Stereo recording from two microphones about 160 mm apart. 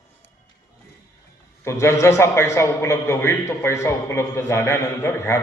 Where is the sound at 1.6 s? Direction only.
20° left (ahead or behind).